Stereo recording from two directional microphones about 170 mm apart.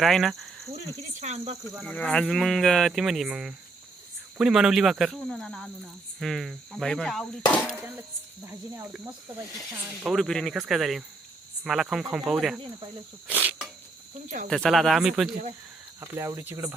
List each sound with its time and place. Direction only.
0.0 s speech: centre (ahead or behind)
1.2 s speech: 40° right (ahead or behind)
1.9 s speech: 5° left (ahead or behind)
7.8 s speech: 10° right (ahead or behind)
13.2 s cricket: 10° right (ahead or behind)
14.3 s speech: 50° right (ahead or behind)
14.5 s speech: centre (ahead or behind)
16.0 s speech: 15° right (ahead or behind)